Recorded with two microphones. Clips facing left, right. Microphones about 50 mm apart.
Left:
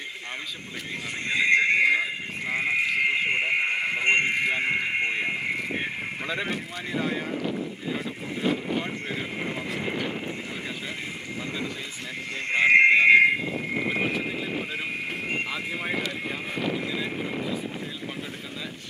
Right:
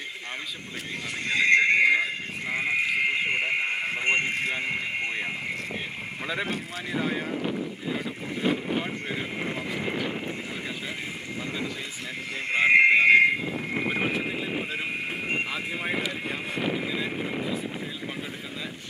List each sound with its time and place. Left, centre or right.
1.3 s neigh: centre
1.8 s neigh: centre
2.5 s sheep: centre
3.7 s a sound: centre
4.0 s a sound: left
4.4 s radio: left
5.1 s vehicle: centre
6.9 s speech: centre
7.5 s boat: centre
12.5 s horse: centre
13.1 s a sound: centre
13.9 s horse: centre
15.2 s a sound: centre